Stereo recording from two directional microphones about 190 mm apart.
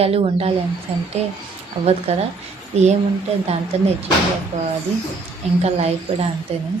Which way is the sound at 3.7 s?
30° right (ahead or behind).